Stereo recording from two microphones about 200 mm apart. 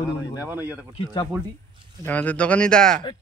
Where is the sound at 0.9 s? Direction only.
25° left (ahead or behind).